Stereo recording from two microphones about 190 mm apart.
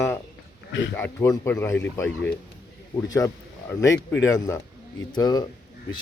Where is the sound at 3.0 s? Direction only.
20° left (ahead or behind).